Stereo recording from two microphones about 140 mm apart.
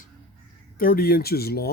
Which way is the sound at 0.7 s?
90° left.